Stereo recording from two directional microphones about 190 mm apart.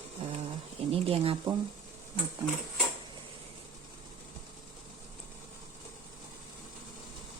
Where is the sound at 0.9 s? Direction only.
30° right (ahead or behind).